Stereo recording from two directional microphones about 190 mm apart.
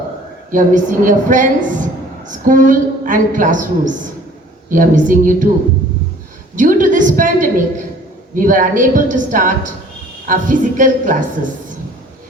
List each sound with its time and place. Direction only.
0.5 s a woman's voice: 45° right (ahead or behind)
6.6 s a woman's voice: 45° right (ahead or behind)